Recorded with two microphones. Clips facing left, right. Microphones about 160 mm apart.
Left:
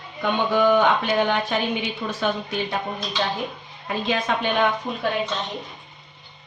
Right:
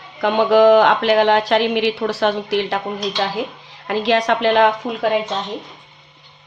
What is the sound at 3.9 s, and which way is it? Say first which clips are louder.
Speech: right 7 dB; 80° right.